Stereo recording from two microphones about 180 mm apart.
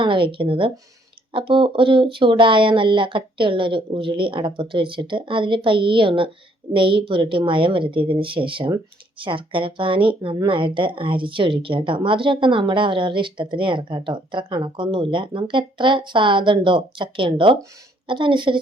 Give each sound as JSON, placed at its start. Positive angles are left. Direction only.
{"t": 0.0, "sound": "speech", "side_deg": -30}